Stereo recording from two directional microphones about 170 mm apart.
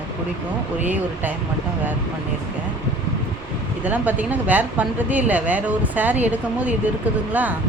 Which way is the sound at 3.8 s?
10° right (ahead or behind).